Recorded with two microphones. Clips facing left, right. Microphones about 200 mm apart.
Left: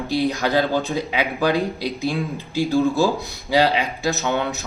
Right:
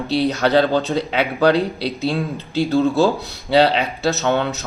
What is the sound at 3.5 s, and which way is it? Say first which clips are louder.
Speech: right 3 dB; 65° right (ahead or behind).